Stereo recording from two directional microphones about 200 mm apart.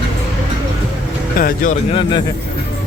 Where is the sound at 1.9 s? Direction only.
25° left (ahead or behind).